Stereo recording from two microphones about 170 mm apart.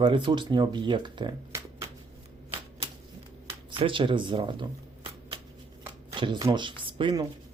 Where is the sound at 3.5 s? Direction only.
30° right (ahead or behind).